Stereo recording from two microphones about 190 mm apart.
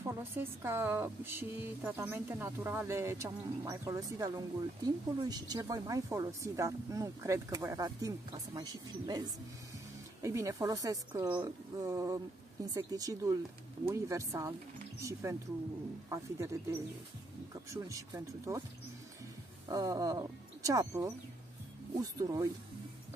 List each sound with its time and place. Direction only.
0.0 s a woman's voice: 15° right (ahead or behind)
10.2 s a woman's voice: 15° right (ahead or behind)
17.6 s a woman's voice: 15° right (ahead or behind)
19.7 s speech: 20° right (ahead or behind)